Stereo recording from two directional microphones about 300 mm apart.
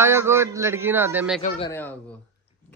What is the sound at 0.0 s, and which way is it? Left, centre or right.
A child's voice, centre.